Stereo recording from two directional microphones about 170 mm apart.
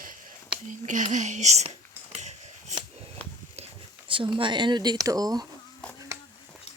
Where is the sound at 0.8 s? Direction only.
45° right (ahead or behind).